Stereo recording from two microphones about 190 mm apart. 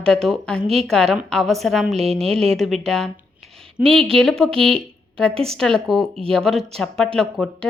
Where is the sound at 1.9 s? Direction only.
30° right (ahead or behind).